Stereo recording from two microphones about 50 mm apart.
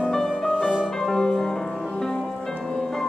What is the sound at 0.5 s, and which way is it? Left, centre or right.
Music, centre.